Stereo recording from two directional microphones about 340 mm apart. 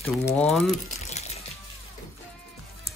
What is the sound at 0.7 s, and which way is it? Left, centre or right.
Water, centre.